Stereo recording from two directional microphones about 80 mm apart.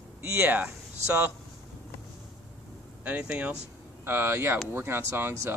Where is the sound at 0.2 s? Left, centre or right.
Right.